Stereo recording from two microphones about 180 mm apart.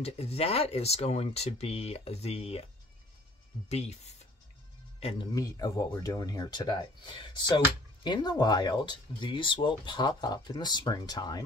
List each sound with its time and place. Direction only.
0.0 s speech: 35° left (ahead or behind)
3.6 s speech: 35° left (ahead or behind)
5.3 s speech: 20° left (ahead or behind)